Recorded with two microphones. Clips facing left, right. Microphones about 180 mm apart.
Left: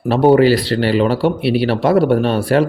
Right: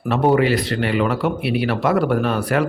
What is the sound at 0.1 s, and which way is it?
Speech, 30° left (ahead or behind).